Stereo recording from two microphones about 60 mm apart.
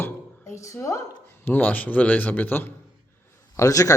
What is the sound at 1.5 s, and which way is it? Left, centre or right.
A man's voice, left.